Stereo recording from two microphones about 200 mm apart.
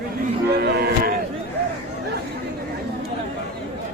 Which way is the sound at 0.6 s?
50° right (ahead or behind).